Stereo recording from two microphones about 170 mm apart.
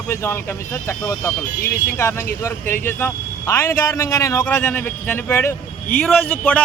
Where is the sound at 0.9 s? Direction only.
15° left (ahead or behind).